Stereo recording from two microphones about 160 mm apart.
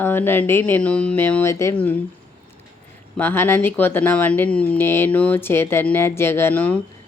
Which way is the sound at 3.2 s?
15° left (ahead or behind).